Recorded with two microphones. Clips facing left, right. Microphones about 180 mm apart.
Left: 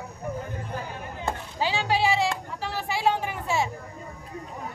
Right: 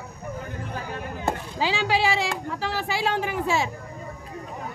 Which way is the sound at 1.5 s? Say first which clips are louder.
Even; 90° right.